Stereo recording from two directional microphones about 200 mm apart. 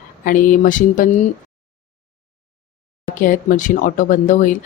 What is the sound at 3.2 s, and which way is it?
Speech, 40° left (ahead or behind).